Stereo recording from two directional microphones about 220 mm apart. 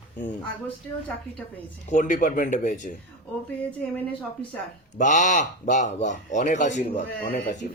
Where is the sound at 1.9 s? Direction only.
35° left (ahead or behind).